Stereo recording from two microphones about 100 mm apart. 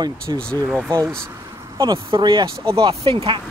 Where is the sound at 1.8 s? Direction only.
50° right (ahead or behind).